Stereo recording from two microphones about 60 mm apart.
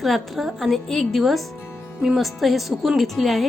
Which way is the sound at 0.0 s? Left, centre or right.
Centre.